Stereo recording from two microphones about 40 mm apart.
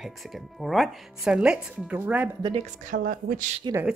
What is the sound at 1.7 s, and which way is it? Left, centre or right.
Speech, right.